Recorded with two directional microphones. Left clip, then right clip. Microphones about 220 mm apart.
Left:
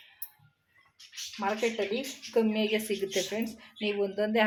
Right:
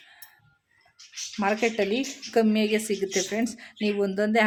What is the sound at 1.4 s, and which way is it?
Speech, 40° right (ahead or behind).